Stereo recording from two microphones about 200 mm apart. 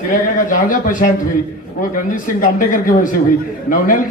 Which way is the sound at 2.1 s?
40° left (ahead or behind).